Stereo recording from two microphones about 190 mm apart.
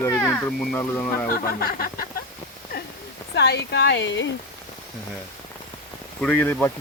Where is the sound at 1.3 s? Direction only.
50° left (ahead or behind).